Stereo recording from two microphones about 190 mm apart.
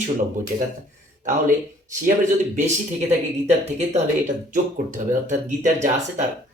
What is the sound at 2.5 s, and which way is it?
Speech, 35° right (ahead or behind).